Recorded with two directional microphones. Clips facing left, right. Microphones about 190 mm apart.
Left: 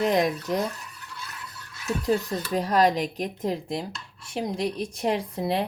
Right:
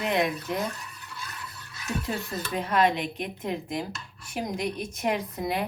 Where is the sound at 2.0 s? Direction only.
35° left (ahead or behind).